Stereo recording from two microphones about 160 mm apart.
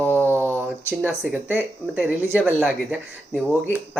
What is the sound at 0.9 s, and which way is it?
Speech, 5° right (ahead or behind).